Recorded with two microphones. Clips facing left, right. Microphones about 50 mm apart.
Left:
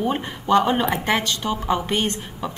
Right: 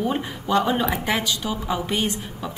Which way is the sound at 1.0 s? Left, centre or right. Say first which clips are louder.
Left 2 dB; left.